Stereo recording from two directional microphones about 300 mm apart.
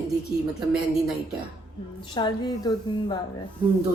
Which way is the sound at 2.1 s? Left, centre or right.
Centre.